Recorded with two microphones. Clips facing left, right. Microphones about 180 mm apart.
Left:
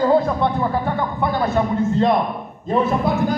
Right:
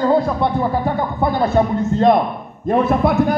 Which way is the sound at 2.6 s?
60° right (ahead or behind).